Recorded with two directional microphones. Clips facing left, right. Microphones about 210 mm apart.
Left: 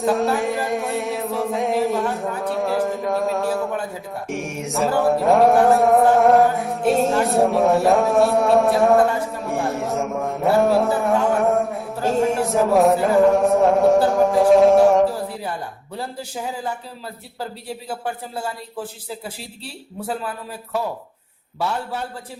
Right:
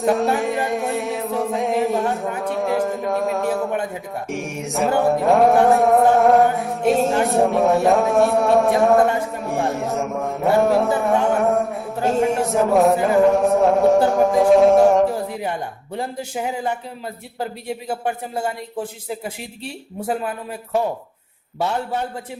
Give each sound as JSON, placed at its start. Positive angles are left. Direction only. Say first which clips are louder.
{"t": 0.0, "sound": "music", "louder": "right 1 dB", "side_deg": 0}
{"t": 4.9, "sound": "chant", "louder": "even", "side_deg": 0}
{"t": 15.1, "sound": "a sound", "louder": "right 3 dB", "side_deg": -20}
{"t": 16.0, "sound": "speech", "louder": "right 3 dB", "side_deg": -20}